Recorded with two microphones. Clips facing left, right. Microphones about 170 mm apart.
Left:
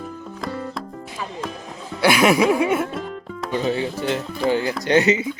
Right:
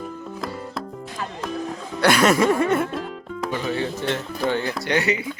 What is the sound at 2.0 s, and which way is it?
Music, 5° left (ahead or behind).